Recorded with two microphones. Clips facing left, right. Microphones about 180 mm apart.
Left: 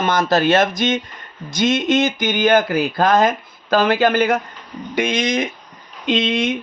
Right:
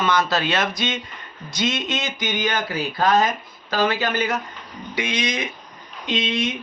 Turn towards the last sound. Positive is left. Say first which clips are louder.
# left 5 dB
turn(degrees=55)  # may be behind; listen again after turning